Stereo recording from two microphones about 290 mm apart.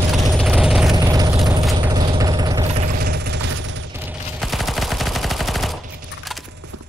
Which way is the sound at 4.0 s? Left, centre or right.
Centre.